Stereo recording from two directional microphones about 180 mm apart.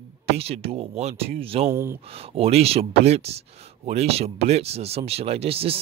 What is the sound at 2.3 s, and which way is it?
Speech, 35° right (ahead or behind).